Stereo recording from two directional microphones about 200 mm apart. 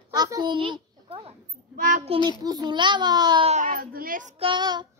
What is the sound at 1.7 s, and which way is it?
A child's voice, 40° right (ahead or behind).